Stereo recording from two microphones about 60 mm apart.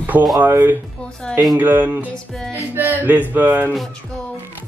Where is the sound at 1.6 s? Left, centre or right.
Right.